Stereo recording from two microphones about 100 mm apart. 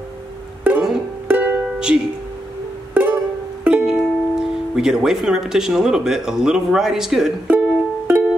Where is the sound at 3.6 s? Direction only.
10° right (ahead or behind).